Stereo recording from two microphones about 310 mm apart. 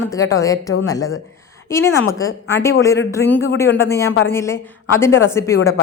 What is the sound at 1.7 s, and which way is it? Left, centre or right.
A woman's voice, centre.